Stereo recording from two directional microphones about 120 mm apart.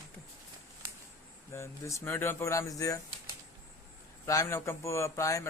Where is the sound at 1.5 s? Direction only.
25° left (ahead or behind).